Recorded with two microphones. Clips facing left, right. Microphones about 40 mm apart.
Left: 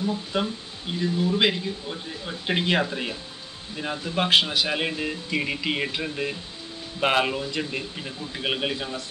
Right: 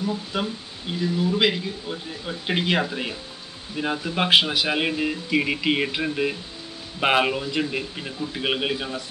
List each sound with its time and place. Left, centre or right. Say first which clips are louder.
0.0 s speech: even; centre